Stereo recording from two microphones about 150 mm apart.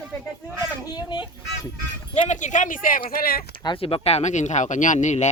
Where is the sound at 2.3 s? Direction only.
55° left (ahead or behind); by 3.5 s 90° left.